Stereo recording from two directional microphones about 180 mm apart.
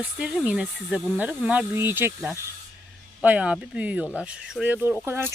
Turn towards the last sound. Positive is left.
turn(degrees=-10)  # may be behind; listen again after turning